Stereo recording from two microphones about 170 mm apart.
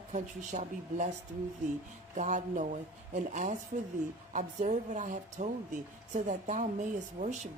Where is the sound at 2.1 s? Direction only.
45° right (ahead or behind).